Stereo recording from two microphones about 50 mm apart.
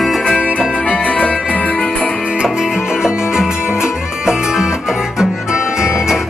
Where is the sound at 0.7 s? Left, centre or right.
Left.